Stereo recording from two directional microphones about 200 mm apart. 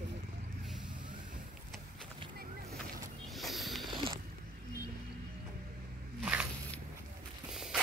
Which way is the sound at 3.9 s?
25° right (ahead or behind).